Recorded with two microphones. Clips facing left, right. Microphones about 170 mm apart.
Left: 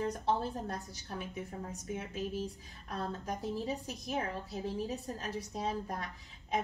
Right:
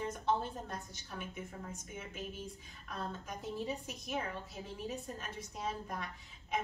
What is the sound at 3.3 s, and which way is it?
A woman's voice, 35° left (ahead or behind).